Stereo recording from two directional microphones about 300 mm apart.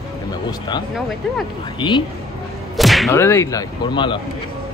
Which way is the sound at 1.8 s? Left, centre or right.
Centre.